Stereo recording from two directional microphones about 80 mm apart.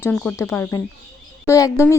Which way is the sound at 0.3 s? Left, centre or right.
Left.